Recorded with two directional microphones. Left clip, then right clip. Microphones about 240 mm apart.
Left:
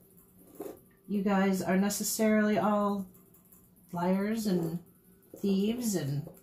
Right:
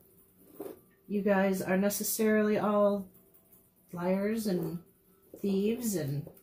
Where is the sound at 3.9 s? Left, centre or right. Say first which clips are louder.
Even; centre.